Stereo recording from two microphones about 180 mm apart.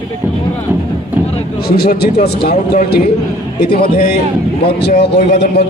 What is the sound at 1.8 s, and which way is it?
A man's voice, 60° left (ahead or behind).